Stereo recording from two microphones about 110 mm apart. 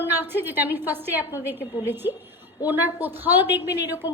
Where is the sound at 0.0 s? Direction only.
20° right (ahead or behind).